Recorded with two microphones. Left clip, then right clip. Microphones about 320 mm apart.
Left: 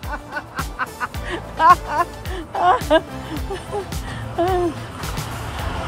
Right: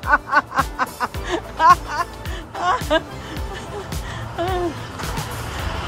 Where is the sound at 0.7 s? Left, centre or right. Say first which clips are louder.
Right 2 dB; centre.